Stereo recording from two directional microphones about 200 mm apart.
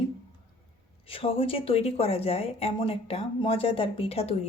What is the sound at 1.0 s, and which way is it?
Speech, 30° left (ahead or behind).